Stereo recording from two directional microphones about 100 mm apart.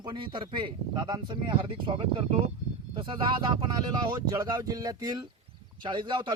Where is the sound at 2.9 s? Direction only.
55° right (ahead or behind).